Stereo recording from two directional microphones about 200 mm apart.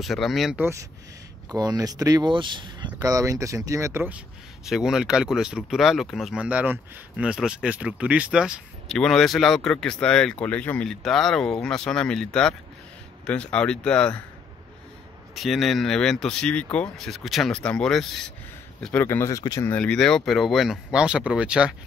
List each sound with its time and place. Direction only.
0.0 s speech: centre (ahead or behind)
15.3 s speech: centre (ahead or behind)